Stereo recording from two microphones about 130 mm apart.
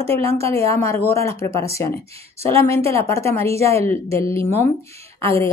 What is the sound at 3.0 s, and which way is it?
Speech, 20° left (ahead or behind).